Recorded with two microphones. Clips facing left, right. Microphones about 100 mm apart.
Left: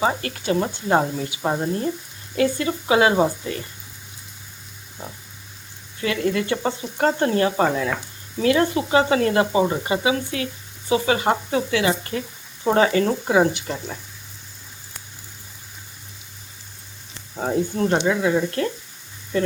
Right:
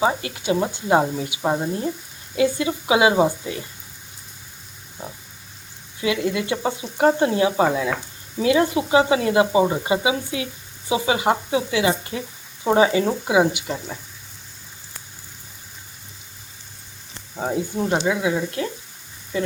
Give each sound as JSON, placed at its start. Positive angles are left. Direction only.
{"t": 0.2, "sound": "speech", "side_deg": -15}
{"t": 6.0, "sound": "speech", "side_deg": -15}
{"t": 17.3, "sound": "speech", "side_deg": -5}